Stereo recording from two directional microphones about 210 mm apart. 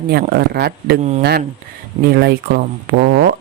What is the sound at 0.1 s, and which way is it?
Speech, 50° right (ahead or behind).